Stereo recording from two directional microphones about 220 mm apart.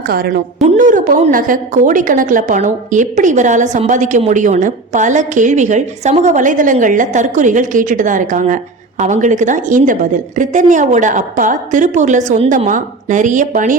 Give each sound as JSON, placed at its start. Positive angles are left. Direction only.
{"t": 0.6, "sound": "a woman's voice", "side_deg": -35}